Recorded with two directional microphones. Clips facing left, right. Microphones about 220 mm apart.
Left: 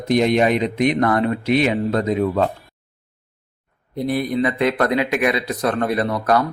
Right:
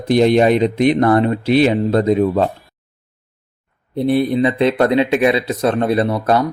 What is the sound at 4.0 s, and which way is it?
A man's voice, 30° right (ahead or behind).